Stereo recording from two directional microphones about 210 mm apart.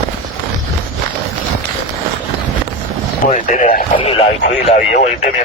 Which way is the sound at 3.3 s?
35° left (ahead or behind).